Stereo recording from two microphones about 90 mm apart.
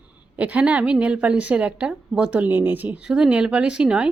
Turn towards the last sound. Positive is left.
turn(degrees=-10)  # may be behind; listen again after turning